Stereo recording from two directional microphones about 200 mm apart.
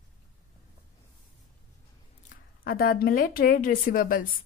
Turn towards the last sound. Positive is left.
turn(degrees=45)  # may be behind; listen again after turning